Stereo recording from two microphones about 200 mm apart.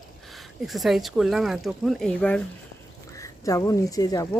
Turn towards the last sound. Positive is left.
turn(degrees=20)  # may be behind; listen again after turning